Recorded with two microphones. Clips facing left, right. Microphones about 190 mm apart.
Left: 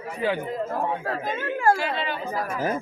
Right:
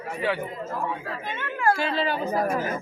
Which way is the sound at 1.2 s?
40° left (ahead or behind).